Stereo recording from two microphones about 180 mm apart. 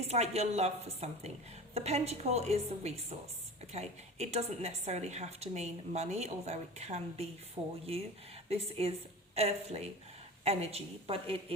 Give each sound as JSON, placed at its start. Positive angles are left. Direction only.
{"t": 0.1, "sound": "a woman's voice", "side_deg": -35}
{"t": 8.4, "sound": "a woman's voice", "side_deg": -35}